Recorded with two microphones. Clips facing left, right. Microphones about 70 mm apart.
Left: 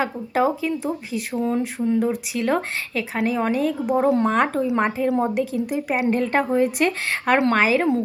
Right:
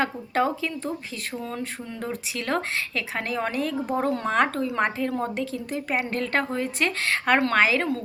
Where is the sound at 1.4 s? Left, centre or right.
Centre.